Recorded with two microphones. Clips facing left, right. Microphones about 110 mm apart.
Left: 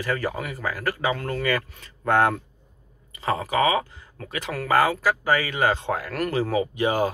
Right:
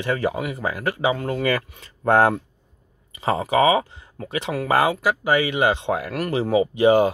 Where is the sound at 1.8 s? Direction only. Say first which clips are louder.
Right 4 dB; 30° right (ahead or behind).